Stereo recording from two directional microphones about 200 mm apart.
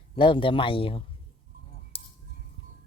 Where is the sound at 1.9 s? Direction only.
30° left (ahead or behind).